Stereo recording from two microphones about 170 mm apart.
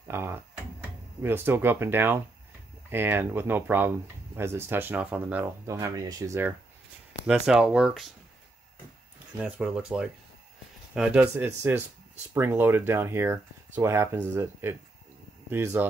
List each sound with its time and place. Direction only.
0.1 s speech: 15° right (ahead or behind)
7.2 s speech: 5° right (ahead or behind)
9.4 s speech: 5° right (ahead or behind)